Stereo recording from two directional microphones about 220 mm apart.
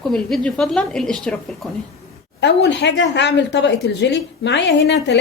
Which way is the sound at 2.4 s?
50° left (ahead or behind).